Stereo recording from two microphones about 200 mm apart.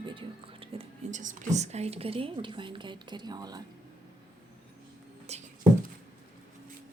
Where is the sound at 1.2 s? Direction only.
35° right (ahead or behind); by 3.6 s 20° right (ahead or behind).